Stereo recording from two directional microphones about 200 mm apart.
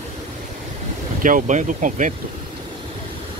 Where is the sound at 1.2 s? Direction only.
40° right (ahead or behind).